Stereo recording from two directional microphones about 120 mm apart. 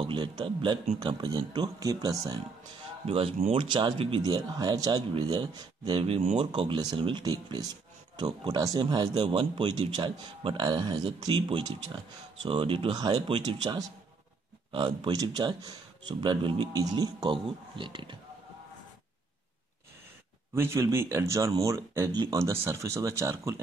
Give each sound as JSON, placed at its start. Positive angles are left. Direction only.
{"t": 0.0, "sound": "speech", "side_deg": -40}
{"t": 3.1, "sound": "speech", "side_deg": -50}
{"t": 20.5, "sound": "speech", "side_deg": -20}
{"t": 22.1, "sound": "speech", "side_deg": -35}
{"t": 22.4, "sound": "speech", "side_deg": -20}